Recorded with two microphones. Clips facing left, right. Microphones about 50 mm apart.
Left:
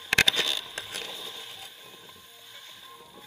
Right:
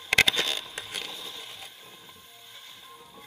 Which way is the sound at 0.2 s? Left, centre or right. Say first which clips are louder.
Right 1 dB; right.